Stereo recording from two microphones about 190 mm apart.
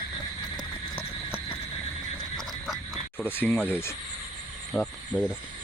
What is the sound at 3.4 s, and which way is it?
Speech, 10° left (ahead or behind).